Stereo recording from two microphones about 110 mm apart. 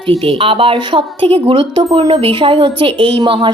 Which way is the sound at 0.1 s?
55° right (ahead or behind).